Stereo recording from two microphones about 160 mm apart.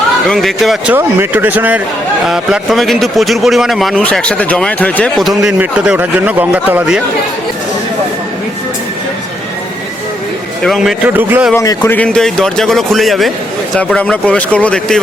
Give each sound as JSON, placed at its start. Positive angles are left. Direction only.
{"t": 0.3, "sound": "a man's voice", "side_deg": 0}
{"t": 0.9, "sound": "a man's voice", "side_deg": -10}
{"t": 10.6, "sound": "a man's voice", "side_deg": 0}
{"t": 11.5, "sound": "speech", "side_deg": 25}
{"t": 11.9, "sound": "a man's voice", "side_deg": 5}